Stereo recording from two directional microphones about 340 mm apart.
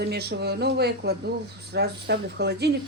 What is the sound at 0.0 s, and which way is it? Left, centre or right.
Speech, right.